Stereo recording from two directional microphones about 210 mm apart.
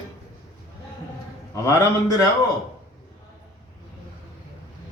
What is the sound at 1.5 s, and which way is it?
Speech, 15° left (ahead or behind).